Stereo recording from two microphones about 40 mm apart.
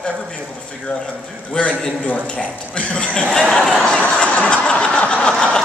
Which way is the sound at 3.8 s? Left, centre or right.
Left.